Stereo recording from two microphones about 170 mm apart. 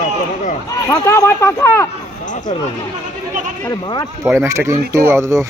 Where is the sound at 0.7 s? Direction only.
20° left (ahead or behind).